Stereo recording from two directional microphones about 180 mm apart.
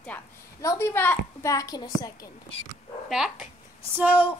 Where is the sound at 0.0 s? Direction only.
15° left (ahead or behind).